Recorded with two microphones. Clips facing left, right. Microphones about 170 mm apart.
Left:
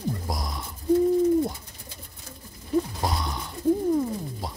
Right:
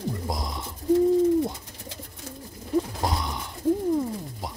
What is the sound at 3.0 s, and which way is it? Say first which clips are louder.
Pigeon: even; 20° right (ahead or behind).